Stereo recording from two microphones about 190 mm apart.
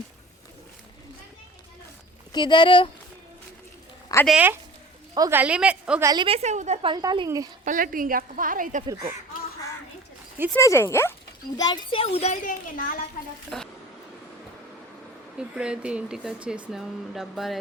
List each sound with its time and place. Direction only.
2.3 s speech: 25° left (ahead or behind)
4.3 s a woman's voice: 5° right (ahead or behind)
5.1 s speech: 20° right (ahead or behind)
5.4 s a woman's voice: 5° right (ahead or behind)
6.1 s a woman's voice: 25° right (ahead or behind)
6.9 s speech: 20° right (ahead or behind)
7.6 s a woman's voice: 45° right (ahead or behind)
8.9 s speech: 20° right (ahead or behind)
10.5 s a child's voice: 15° left (ahead or behind); by 12.8 s 45° left (ahead or behind)
13.5 s speech: centre (ahead or behind)
15.4 s speech: 5° right (ahead or behind)